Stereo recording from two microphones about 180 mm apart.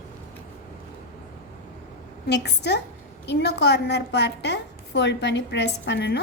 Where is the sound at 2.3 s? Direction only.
70° left (ahead or behind).